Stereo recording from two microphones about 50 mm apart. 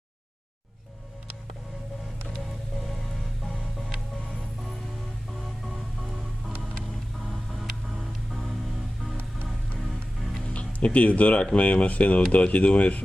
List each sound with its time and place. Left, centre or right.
2.3 s music: centre
10.5 s speech: left